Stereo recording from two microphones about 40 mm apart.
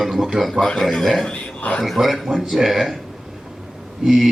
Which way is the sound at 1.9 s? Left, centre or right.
Centre.